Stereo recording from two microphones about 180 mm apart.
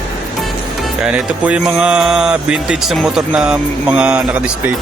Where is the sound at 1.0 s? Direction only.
5° right (ahead or behind).